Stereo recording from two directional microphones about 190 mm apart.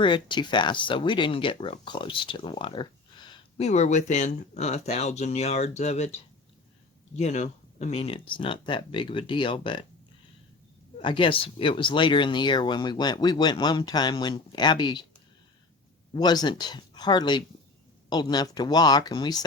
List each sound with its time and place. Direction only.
0.0 s speech: 25° left (ahead or behind)
3.7 s speech: 35° left (ahead or behind)
7.2 s speech: 35° left (ahead or behind)
10.9 s speech: 25° left (ahead or behind)
16.1 s speech: 20° left (ahead or behind)